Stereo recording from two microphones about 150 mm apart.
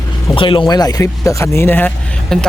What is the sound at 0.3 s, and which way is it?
Speech, 35° left (ahead or behind).